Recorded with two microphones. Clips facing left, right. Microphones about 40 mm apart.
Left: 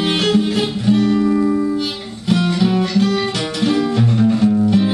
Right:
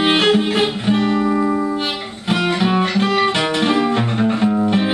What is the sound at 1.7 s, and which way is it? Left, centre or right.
Music, right.